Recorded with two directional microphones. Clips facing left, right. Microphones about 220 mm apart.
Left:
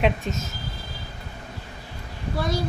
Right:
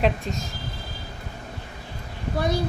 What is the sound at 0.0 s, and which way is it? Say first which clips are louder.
Speech: even; centre (ahead or behind).